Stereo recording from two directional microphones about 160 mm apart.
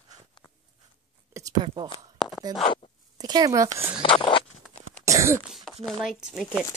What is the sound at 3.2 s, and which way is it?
Speech, 25° right (ahead or behind).